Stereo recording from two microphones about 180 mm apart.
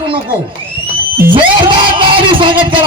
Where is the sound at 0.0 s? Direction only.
30° right (ahead or behind).